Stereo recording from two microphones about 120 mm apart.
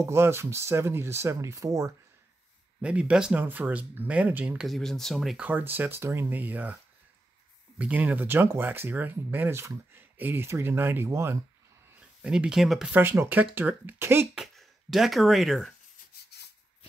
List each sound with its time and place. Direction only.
0.0 s speech: 20° right (ahead or behind)
2.8 s speech: 10° right (ahead or behind)
4.6 s speech: 5° left (ahead or behind)
5.4 s speech: 15° right (ahead or behind)
7.8 s speech: 10° right (ahead or behind)
12.2 s speech: 10° right (ahead or behind)
12.9 s speech: 20° right (ahead or behind)
14.3 s speech: centre (ahead or behind)